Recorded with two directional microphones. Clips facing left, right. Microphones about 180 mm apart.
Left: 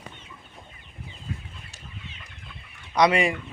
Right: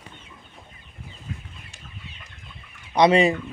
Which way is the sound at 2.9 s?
25° right (ahead or behind).